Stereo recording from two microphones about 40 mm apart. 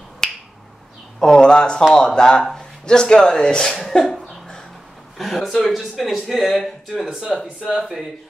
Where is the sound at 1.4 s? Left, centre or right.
Left.